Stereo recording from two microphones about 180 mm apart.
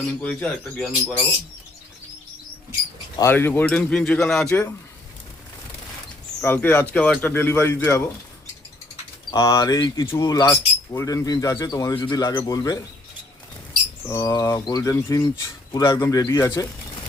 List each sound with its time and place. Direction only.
0.2 s speech: 5° left (ahead or behind)
3.2 s speech: 15° left (ahead or behind)
4.4 s speech: 15° left (ahead or behind)
6.4 s speech: 10° left (ahead or behind)
9.3 s speech: 15° left (ahead or behind)
14.1 s speech: 20° left (ahead or behind)